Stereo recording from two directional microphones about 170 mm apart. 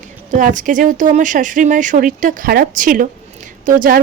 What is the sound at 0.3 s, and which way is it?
Speech, 50° right (ahead or behind).